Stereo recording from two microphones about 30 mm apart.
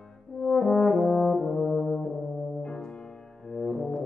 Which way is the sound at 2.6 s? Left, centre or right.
Left.